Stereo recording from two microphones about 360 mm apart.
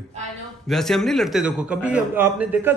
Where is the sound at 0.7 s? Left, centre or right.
Centre.